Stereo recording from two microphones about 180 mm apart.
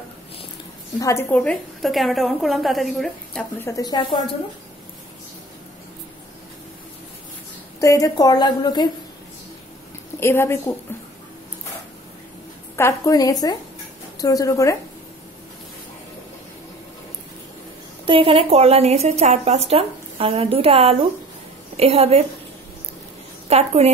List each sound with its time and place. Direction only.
0.9 s a woman's voice: 15° left (ahead or behind)
3.5 s a woman's voice: 15° left (ahead or behind)
7.8 s a woman's voice: 20° left (ahead or behind)
10.2 s a woman's voice: 15° left (ahead or behind)
12.7 s a woman's voice: 15° left (ahead or behind)
18.0 s a woman's voice: 30° right (ahead or behind)
23.5 s a woman's voice: 35° right (ahead or behind)